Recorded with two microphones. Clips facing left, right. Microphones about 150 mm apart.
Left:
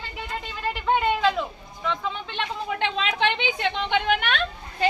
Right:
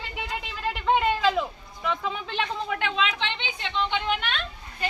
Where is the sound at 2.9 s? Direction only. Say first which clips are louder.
Left 4 dB; 45° left (ahead or behind).